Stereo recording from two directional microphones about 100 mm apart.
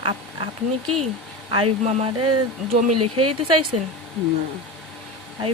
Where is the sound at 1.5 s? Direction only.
70° right (ahead or behind); by 2.3 s 90° right.